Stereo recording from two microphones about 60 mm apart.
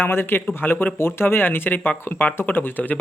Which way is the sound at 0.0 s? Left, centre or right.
Left.